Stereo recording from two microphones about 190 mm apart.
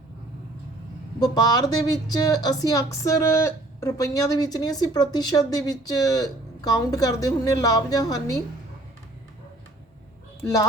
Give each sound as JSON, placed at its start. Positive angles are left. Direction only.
{"t": 1.2, "sound": "speech", "side_deg": 20}